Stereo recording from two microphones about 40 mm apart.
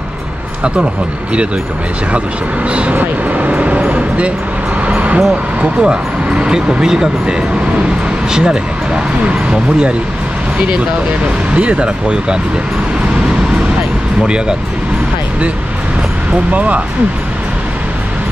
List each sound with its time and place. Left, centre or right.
2.7 s speech: right
3.0 s vehicle: right
4.8 s music: right
5.8 s speech: right
11.5 s speech: right
16.5 s speech: right